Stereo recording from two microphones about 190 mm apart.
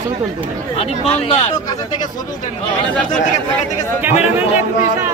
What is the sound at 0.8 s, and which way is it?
Speech, 30° left (ahead or behind).